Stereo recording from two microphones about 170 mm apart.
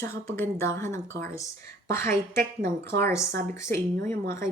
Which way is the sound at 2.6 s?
15° left (ahead or behind).